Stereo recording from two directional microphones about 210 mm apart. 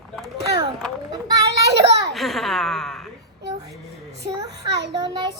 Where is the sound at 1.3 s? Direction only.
15° right (ahead or behind).